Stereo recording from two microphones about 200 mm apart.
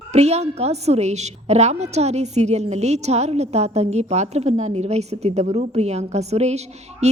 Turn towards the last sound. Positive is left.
turn(degrees=-35)  # may be behind; listen again after turning